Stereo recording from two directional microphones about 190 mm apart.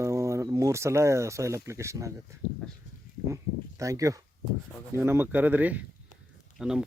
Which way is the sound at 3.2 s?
15° right (ahead or behind).